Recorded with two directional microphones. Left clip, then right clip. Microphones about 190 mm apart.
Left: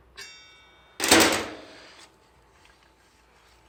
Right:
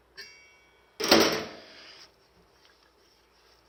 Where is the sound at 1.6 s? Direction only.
10° right (ahead or behind).